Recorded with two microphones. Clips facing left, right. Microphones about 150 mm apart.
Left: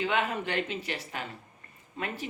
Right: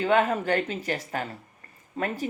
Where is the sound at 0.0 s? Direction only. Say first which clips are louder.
Right 6 dB; 40° right (ahead or behind).